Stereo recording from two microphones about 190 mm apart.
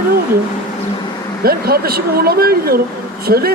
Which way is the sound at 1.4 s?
55° right (ahead or behind).